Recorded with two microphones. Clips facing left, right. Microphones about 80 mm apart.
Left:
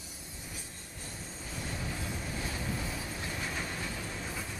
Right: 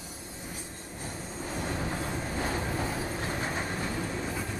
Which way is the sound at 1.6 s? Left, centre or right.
Right.